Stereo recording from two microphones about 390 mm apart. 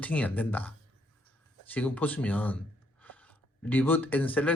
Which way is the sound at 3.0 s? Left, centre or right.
Centre.